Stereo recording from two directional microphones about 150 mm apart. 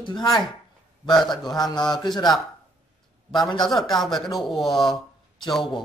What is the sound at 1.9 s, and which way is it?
Speech, 30° left (ahead or behind).